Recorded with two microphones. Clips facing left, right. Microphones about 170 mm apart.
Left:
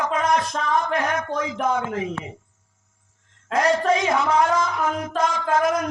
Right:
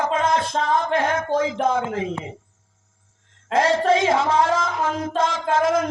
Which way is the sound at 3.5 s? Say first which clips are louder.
Right 2 dB; 25° right (ahead or behind).